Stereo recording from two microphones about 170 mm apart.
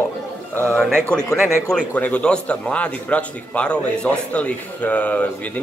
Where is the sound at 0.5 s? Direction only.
5° left (ahead or behind).